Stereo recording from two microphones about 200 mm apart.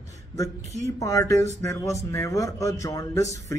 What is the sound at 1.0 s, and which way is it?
Speech, 15° left (ahead or behind).